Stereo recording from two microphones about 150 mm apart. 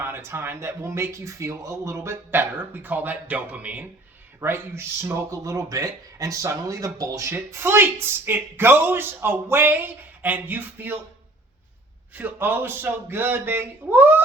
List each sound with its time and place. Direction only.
0.0 s speech: 15° right (ahead or behind)
12.1 s speech: 10° right (ahead or behind)